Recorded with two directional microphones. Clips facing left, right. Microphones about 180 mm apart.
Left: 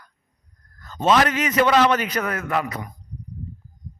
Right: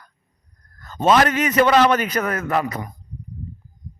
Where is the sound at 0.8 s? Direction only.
50° right (ahead or behind).